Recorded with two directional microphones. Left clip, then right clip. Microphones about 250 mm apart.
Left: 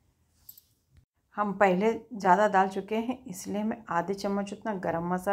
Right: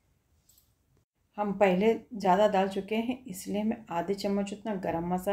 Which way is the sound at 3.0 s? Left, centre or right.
Centre.